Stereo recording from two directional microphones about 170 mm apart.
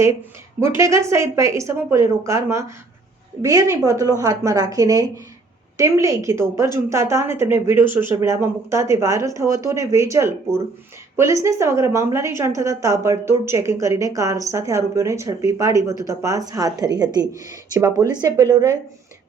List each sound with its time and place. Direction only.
0.6 s a woman's voice: 15° right (ahead or behind)